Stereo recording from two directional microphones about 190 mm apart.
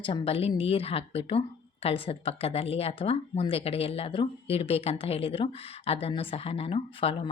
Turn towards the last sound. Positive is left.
turn(degrees=30)  # may be behind; listen again after turning